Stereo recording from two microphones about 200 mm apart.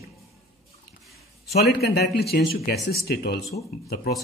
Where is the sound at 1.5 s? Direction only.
55° left (ahead or behind).